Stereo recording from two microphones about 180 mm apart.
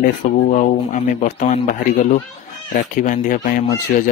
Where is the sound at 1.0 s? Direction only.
40° left (ahead or behind).